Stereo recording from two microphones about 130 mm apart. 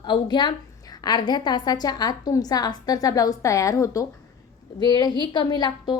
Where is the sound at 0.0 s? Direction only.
35° left (ahead or behind).